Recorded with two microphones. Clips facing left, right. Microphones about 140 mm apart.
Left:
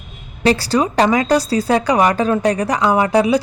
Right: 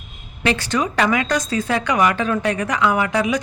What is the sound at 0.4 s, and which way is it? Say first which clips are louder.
A woman's voice: left 5 dB; 35° left (ahead or behind).